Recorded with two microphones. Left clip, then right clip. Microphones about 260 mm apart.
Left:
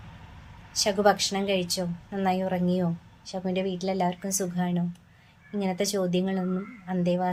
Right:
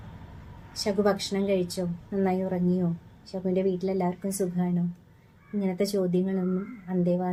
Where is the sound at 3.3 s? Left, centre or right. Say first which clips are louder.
Right 2 dB; left.